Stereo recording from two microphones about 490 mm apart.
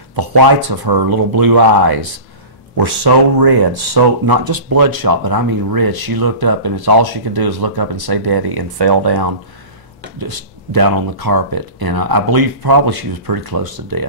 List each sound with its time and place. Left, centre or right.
0.1 s speech: right